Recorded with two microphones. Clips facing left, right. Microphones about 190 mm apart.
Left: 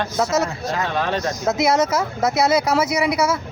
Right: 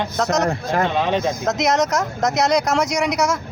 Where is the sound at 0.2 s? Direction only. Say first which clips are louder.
Even; 5° left (ahead or behind).